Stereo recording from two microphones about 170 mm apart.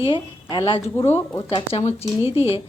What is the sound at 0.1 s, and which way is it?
A woman's voice, 30° left (ahead or behind).